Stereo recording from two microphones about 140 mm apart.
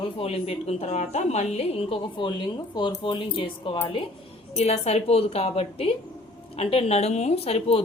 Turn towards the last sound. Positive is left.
turn(degrees=45)  # may be behind; listen again after turning